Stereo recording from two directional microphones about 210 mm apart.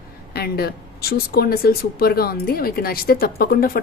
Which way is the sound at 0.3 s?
50° left (ahead or behind).